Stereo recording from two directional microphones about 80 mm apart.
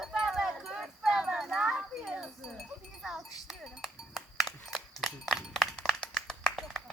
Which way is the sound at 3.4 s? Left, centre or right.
Centre.